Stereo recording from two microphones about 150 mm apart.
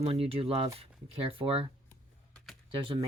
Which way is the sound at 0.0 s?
40° right (ahead or behind).